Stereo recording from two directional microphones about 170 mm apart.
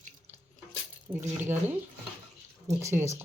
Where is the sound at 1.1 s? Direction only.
15° right (ahead or behind).